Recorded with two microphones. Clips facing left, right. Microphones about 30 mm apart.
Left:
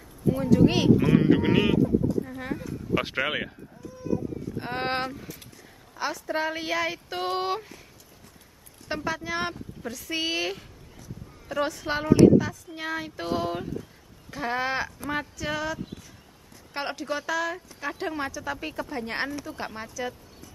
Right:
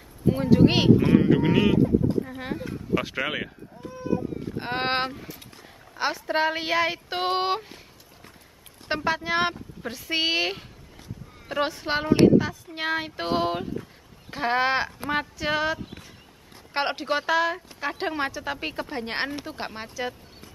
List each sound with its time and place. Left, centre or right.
0.3 s a woman's voice: right
1.1 s speech: centre
1.8 s speech: right
2.2 s speech: centre
3.2 s speech: centre
3.8 s a sound: right
4.6 s a woman's voice: right
5.1 s speech: right
5.9 s a woman's voice: right
8.8 s a woman's voice: right
11.0 s clip-clop: right
12.4 s a woman's voice: right